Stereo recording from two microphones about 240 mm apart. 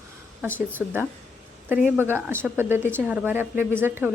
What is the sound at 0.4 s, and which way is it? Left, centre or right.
Speech, centre.